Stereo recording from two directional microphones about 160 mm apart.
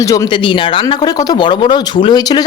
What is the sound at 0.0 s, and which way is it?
Speech, 20° left (ahead or behind).